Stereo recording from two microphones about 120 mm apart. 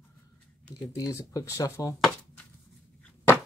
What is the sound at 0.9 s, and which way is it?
Speech, 30° left (ahead or behind).